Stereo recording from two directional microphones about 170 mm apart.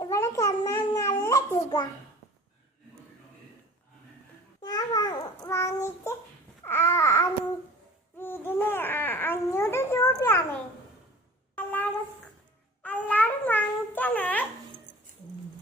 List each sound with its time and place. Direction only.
0.0 s babbling: 20° left (ahead or behind)
4.6 s a child's voice: 20° left (ahead or behind)
11.5 s a sound: 10° left (ahead or behind)
12.8 s speech: 10° left (ahead or behind)